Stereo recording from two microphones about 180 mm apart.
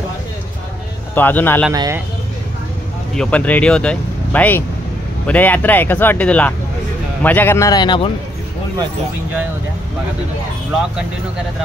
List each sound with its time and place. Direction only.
1.1 s speech: 10° left (ahead or behind)
1.7 s speech: 20° right (ahead or behind)
3.2 s speech: 5° left (ahead or behind); by 8.1 s 25° left (ahead or behind)